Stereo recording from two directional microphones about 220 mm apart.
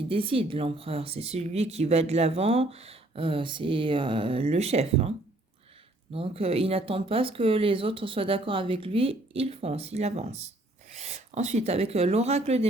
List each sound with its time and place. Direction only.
0.1 s speech: 25° right (ahead or behind)
6.1 s speech: 25° right (ahead or behind)